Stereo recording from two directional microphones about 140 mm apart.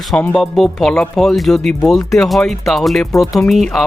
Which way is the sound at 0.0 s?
Centre (ahead or behind).